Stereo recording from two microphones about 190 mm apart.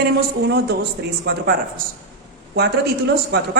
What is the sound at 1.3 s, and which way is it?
Speech, 60° right (ahead or behind).